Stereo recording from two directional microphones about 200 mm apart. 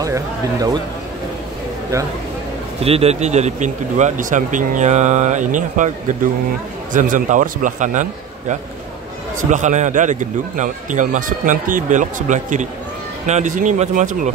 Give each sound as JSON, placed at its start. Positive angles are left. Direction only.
{"t": 0.0, "sound": "speech", "side_deg": -15}
{"t": 2.8, "sound": "speech", "side_deg": -30}